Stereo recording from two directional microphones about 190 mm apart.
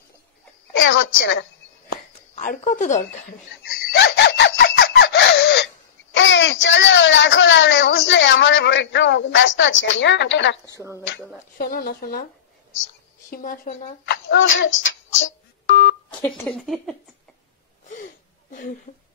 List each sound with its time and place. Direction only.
0.7 s a woman's voice: 90° left
2.3 s speech: 40° left (ahead or behind)
3.9 s chicken: 65° left (ahead or behind)
6.1 s speech: 70° left (ahead or behind)
10.7 s speech: 15° right (ahead or behind)
11.5 s speech: 50° left (ahead or behind)
13.3 s speech: 45° left (ahead or behind)
14.0 s a child's voice: 65° left (ahead or behind)
15.2 s telephone dialing: 70° left (ahead or behind)
16.4 s speech: centre (ahead or behind)
17.8 s a sound: 40° left (ahead or behind)